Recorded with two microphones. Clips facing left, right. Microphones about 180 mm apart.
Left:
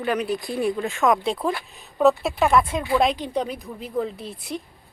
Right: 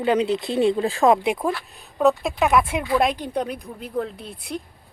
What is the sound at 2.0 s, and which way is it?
Speech, centre (ahead or behind).